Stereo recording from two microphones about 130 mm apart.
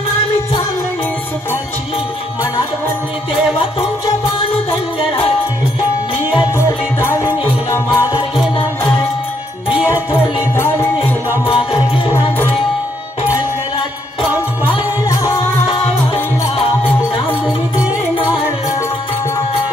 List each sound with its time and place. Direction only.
6.5 s music: 20° left (ahead or behind)
10.5 s music: 20° left (ahead or behind)
11.4 s music: 45° left (ahead or behind)
12.1 s music: 15° left (ahead or behind)